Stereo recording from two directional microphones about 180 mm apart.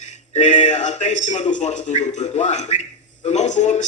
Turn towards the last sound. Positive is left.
turn(degrees=40)  # may be behind; listen again after turning